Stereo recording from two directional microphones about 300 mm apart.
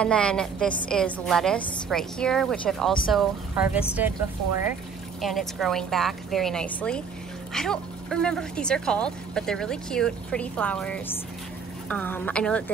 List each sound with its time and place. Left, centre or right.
0.0 s a woman's voice: centre
5.2 s speech: centre